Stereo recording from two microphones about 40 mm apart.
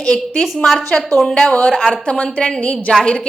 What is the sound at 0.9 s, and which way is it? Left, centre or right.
Speech, left.